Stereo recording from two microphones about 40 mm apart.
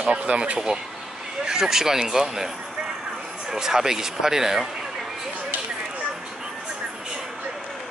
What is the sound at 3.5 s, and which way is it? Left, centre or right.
Speech, centre.